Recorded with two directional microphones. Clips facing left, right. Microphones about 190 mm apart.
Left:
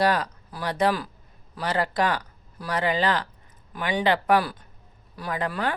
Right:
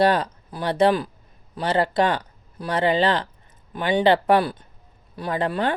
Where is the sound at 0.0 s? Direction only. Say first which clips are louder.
Right 4 dB; 25° right (ahead or behind).